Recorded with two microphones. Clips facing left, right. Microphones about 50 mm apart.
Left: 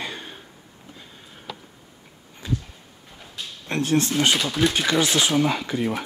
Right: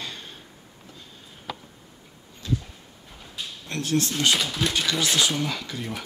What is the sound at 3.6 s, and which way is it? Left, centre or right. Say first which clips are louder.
Speech: left 4 dB; left.